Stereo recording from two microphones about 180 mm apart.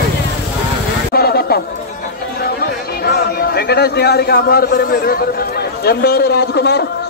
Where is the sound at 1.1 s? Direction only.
60° left (ahead or behind).